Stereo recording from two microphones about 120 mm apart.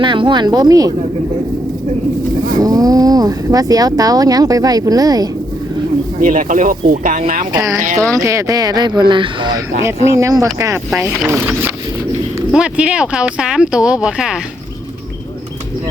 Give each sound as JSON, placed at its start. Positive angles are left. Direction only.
{"t": 0.0, "sound": "speech", "side_deg": -40}
{"t": 2.6, "sound": "speech", "side_deg": -30}
{"t": 6.2, "sound": "speech", "side_deg": -90}
{"t": 7.5, "sound": "speech", "side_deg": -30}
{"t": 10.1, "sound": "speech", "side_deg": -25}
{"t": 12.5, "sound": "speech", "side_deg": -10}